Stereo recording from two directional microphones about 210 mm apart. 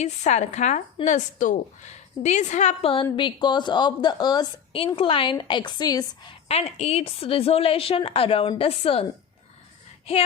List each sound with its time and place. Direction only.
0.0 s a woman's voice: 35° left (ahead or behind)
6.5 s a woman's voice: 30° left (ahead or behind)